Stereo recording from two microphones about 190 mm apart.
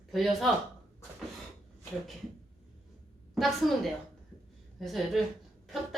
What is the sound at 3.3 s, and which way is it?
Speech, centre (ahead or behind).